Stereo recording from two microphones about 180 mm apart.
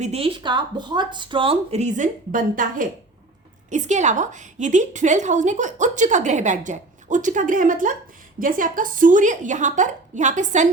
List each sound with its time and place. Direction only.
0.0 s a woman's voice: 35° right (ahead or behind)